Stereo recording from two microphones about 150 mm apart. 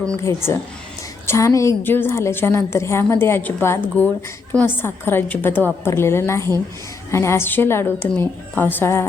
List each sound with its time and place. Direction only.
0.2 s a woman's voice: 20° left (ahead or behind)